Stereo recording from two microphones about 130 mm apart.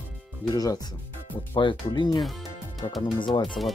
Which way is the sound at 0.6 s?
30° left (ahead or behind).